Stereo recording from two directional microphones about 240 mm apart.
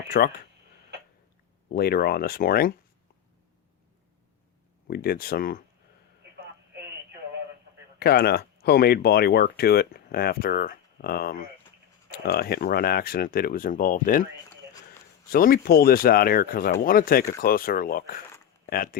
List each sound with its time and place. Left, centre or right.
0.1 s speech: left
1.7 s speech: left
4.9 s speech: left
7.9 s speech: left
15.3 s speech: left